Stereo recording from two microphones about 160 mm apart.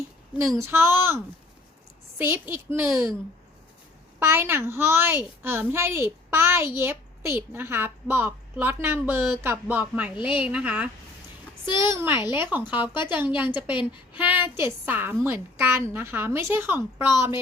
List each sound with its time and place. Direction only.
0.3 s a woman's voice: 15° right (ahead or behind)
4.2 s a woman's voice: 15° right (ahead or behind)
11.6 s a woman's voice: 30° left (ahead or behind)
11.9 s a woman's voice: 15° right (ahead or behind)